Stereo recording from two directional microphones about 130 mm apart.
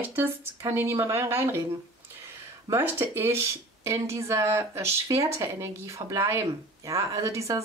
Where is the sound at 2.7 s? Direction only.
20° right (ahead or behind).